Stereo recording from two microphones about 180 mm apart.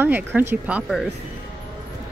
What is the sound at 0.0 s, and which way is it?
Speech, 10° right (ahead or behind).